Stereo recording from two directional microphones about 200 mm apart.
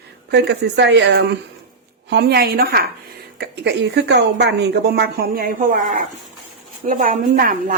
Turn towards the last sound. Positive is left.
turn(degrees=-45)  # may be behind; listen again after turning